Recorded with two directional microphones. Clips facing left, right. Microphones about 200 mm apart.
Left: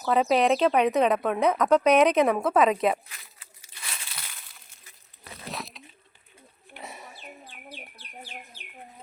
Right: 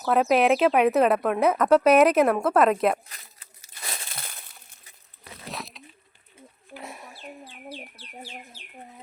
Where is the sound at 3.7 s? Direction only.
40° right (ahead or behind).